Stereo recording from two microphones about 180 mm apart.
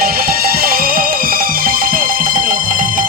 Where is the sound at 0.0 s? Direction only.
55° right (ahead or behind).